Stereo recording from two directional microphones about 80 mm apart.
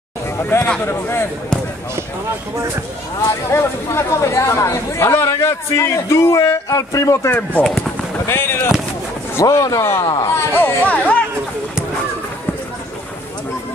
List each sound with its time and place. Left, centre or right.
0.4 s speech: left
3.5 s speech: left
7.2 s speech: left
7.6 s speech: centre
8.3 s speech: left
9.4 s speech: left
10.0 s speech: left
10.3 s speech: left